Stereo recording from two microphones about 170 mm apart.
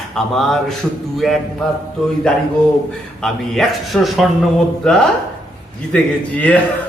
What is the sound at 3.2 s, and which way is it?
A man's voice, centre (ahead or behind).